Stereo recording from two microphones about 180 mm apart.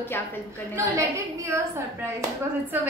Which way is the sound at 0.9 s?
15° right (ahead or behind).